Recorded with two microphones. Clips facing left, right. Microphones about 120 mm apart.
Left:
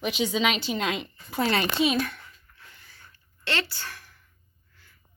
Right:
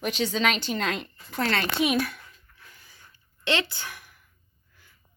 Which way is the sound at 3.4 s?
20° right (ahead or behind).